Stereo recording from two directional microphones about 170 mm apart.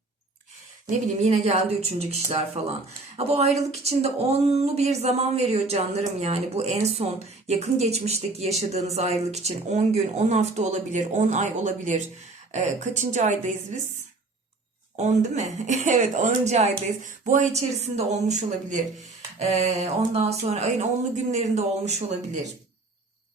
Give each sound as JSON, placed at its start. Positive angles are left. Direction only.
{"t": 0.9, "sound": "speech", "side_deg": -40}
{"t": 14.9, "sound": "speech", "side_deg": -45}